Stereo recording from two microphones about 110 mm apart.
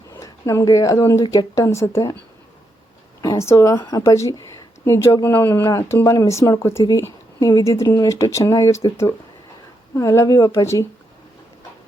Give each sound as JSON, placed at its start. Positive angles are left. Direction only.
{"t": 0.1, "sound": "speech", "side_deg": 25}
{"t": 3.2, "sound": "speech", "side_deg": 30}